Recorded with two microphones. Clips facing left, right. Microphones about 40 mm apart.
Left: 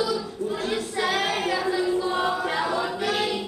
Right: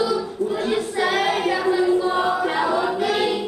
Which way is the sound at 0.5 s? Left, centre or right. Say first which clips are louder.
Right 5 dB; centre.